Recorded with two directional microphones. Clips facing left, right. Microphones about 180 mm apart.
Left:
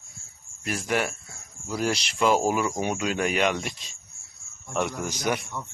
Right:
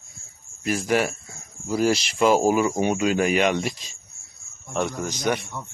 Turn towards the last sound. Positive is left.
turn(degrees=0)  # may be behind; listen again after turning